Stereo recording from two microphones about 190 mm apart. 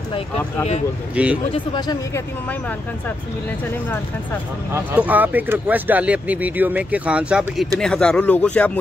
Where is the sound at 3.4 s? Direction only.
10° left (ahead or behind).